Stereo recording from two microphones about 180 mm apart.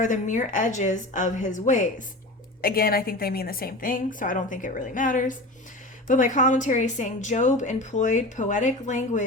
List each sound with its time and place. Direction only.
0.0 s a woman's voice: 45° left (ahead or behind)
2.6 s a woman's voice: 55° left (ahead or behind)